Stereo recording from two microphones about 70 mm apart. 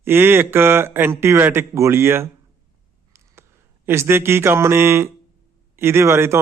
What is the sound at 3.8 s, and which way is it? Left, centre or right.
Speech, right.